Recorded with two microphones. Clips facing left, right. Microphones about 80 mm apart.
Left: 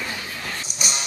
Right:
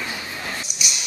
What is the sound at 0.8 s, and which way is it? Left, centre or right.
Music, left.